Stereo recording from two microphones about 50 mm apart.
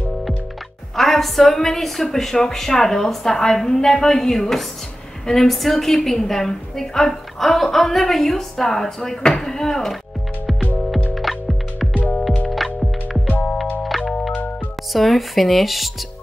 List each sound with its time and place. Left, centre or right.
0.9 s a woman's voice: centre
11.1 s music: centre
11.9 s music: left
12.6 s music: centre
13.8 s music: centre
14.9 s speech: centre